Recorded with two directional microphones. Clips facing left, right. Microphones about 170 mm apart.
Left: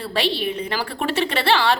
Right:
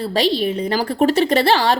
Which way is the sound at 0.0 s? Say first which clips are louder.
Right 5 dB; 40° right (ahead or behind).